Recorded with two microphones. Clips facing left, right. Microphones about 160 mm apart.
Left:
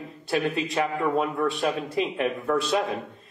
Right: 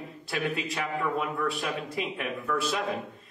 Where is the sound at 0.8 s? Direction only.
35° left (ahead or behind).